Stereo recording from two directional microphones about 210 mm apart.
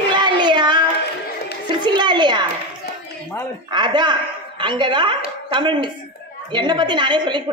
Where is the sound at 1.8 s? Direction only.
20° right (ahead or behind).